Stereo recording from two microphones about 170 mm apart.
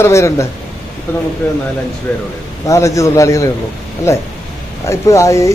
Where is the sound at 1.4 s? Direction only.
5° left (ahead or behind).